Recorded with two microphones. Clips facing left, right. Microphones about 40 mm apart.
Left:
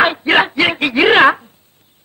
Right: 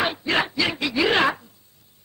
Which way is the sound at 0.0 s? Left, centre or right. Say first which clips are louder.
Left 10 dB; left.